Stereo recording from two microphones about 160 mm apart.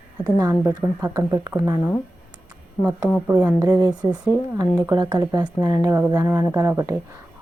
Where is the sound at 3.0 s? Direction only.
Centre (ahead or behind).